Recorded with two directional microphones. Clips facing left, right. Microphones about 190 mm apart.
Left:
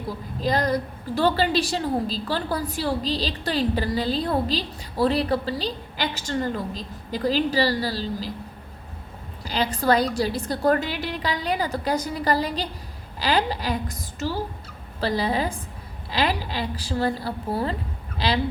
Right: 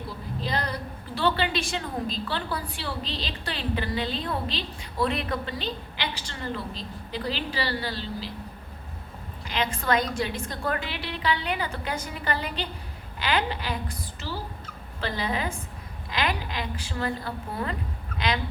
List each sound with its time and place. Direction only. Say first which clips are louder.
0.4 s a woman's voice: left 8 dB; 40° left (ahead or behind)
9.4 s a woman's voice: left 5 dB; 35° left (ahead or behind)